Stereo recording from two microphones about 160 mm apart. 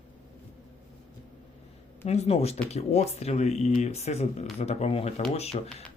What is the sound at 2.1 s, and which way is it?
Speech, 40° left (ahead or behind).